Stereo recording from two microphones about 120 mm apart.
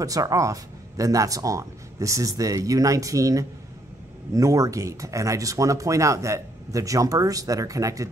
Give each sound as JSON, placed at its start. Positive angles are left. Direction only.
{"t": 0.0, "sound": "speech", "side_deg": -30}